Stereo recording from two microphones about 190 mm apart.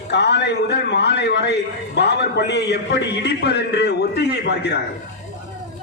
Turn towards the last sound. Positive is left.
turn(degrees=60)  # may be behind; listen again after turning